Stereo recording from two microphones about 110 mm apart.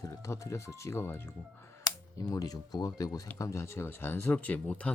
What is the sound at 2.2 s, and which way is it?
Speech, 35° left (ahead or behind).